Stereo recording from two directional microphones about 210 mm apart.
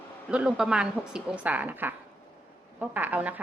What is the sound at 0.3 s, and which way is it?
A woman's voice, 5° right (ahead or behind).